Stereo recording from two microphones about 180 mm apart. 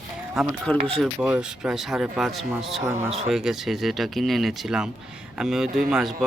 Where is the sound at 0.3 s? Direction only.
5° left (ahead or behind).